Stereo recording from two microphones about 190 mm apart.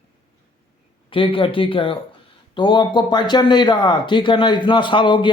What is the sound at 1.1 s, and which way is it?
Speech, 25° left (ahead or behind).